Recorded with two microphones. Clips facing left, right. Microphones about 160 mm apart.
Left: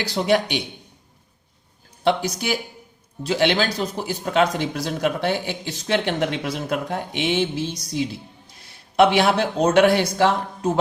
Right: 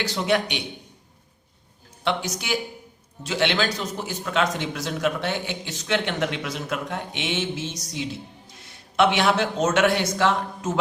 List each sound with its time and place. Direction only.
0.0 s speech: 35° left (ahead or behind)
2.0 s speech: 40° left (ahead or behind)